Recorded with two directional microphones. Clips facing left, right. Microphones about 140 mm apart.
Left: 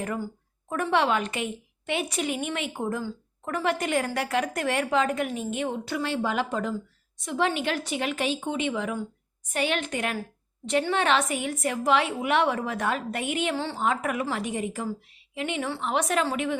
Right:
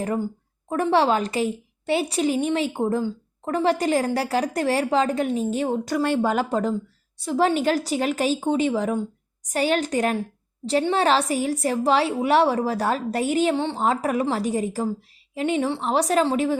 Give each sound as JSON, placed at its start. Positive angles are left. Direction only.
{"t": 0.7, "sound": "a woman's voice", "side_deg": -30}